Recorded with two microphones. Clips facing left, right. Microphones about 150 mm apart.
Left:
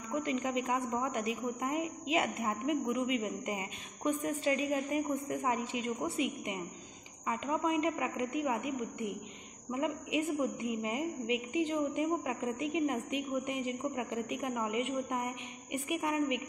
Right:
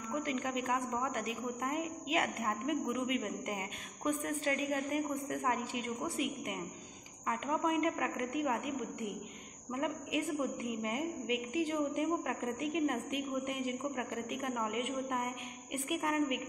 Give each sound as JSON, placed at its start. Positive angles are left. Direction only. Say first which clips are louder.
{"t": 0.2, "sound": "a woman's voice", "louder": "left 4 dB", "side_deg": 0}
{"t": 9.7, "sound": "a woman's voice", "louder": "left 2 dB", "side_deg": 5}